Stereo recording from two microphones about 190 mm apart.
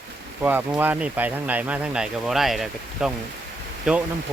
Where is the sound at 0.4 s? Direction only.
10° right (ahead or behind).